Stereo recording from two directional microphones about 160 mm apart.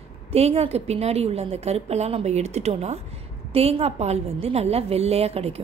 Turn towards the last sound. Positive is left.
turn(degrees=-40)  # may be behind; listen again after turning